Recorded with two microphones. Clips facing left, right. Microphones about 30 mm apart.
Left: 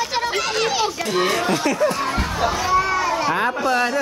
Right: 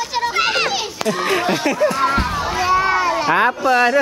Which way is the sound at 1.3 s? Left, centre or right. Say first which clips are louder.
Right 2 dB; right.